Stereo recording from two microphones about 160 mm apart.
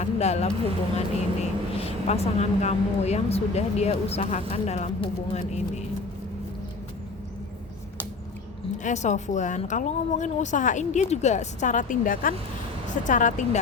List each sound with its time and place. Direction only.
0.0 s speech: 45° left (ahead or behind)
8.8 s speech: 50° left (ahead or behind)